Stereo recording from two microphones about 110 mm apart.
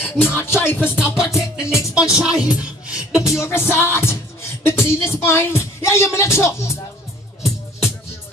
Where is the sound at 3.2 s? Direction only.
25° left (ahead or behind).